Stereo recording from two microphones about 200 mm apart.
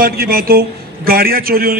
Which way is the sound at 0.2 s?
50° right (ahead or behind).